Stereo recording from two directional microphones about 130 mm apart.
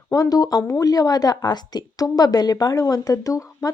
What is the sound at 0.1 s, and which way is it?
Speech, 30° left (ahead or behind).